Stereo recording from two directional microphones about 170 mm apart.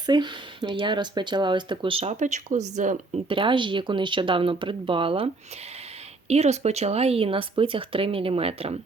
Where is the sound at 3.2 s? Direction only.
30° right (ahead or behind).